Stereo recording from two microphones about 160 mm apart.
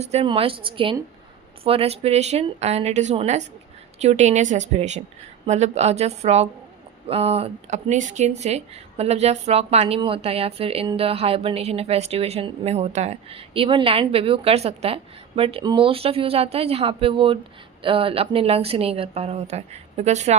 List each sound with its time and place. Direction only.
0.0 s speech: 40° right (ahead or behind)